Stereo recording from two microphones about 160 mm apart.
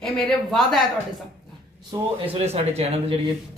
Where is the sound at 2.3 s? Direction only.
40° right (ahead or behind).